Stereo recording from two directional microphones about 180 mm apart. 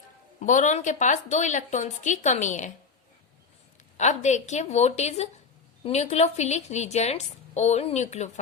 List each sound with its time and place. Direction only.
0.4 s a woman's voice: 45° left (ahead or behind)
3.9 s a woman's voice: 40° left (ahead or behind)